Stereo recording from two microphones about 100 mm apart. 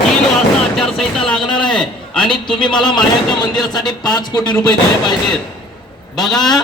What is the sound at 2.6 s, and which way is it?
Speech, 50° left (ahead or behind).